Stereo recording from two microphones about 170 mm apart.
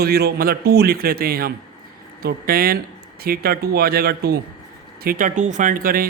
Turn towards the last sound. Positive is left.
turn(degrees=-55)  # may be behind; listen again after turning